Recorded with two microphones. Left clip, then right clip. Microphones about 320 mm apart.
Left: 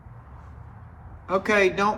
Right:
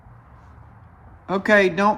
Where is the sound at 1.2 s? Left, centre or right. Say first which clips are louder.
Right 4 dB; right.